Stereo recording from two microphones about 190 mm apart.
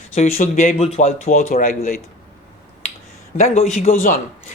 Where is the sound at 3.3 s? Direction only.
35° left (ahead or behind).